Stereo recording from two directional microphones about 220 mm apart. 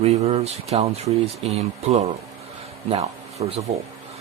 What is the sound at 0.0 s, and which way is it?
Speech, 30° right (ahead or behind).